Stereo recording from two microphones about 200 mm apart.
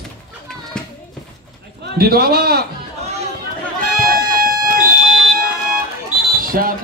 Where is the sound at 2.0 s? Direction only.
50° right (ahead or behind).